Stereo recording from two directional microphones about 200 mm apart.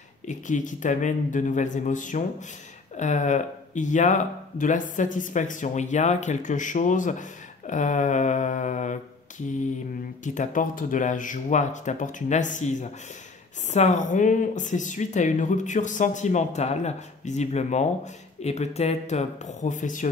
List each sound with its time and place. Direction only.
0.3 s speech: 40° left (ahead or behind)
10.2 s speech: 40° left (ahead or behind)